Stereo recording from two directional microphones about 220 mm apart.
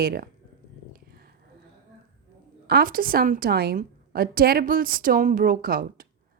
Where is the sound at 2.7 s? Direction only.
40° right (ahead or behind).